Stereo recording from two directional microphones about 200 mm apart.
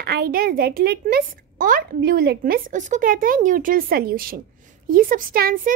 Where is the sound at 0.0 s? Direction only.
50° right (ahead or behind).